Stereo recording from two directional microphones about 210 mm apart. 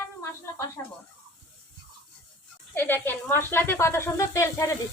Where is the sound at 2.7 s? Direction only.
10° left (ahead or behind).